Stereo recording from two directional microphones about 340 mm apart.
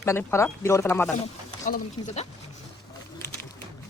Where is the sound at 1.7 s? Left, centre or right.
Left.